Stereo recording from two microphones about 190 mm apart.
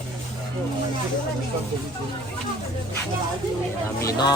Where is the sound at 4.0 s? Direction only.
20° left (ahead or behind).